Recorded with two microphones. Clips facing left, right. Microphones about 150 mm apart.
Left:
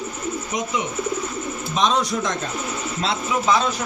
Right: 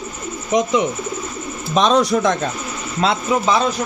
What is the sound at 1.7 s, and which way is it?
Speech, 70° right (ahead or behind).